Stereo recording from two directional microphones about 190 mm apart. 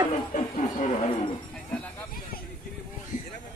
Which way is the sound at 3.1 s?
45° left (ahead or behind).